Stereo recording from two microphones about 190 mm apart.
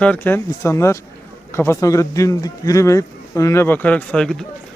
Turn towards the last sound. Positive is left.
turn(degrees=5)  # may be behind; listen again after turning